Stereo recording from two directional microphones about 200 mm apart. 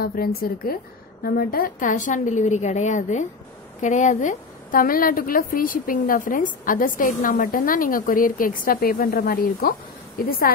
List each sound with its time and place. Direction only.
0.0 s a woman's voice: 50° left (ahead or behind)